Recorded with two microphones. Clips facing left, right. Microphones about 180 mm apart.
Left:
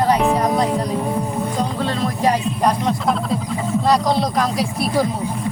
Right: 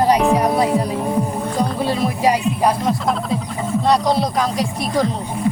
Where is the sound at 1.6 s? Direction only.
10° right (ahead or behind).